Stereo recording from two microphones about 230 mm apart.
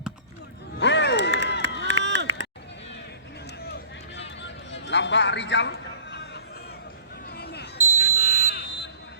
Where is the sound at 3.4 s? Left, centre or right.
Left.